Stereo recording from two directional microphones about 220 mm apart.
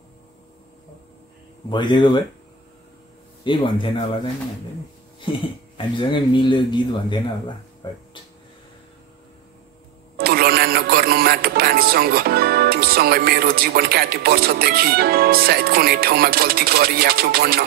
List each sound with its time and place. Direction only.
1.7 s speech: 20° left (ahead or behind)
3.4 s speech: 20° left (ahead or behind)
5.2 s speech: 20° left (ahead or behind)
10.1 s speech: 45° right (ahead or behind)